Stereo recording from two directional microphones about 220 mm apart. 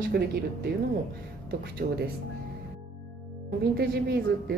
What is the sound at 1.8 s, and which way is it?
Speech, 30° right (ahead or behind).